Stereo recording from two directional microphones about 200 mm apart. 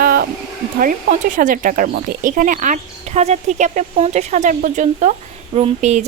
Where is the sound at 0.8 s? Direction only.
40° right (ahead or behind).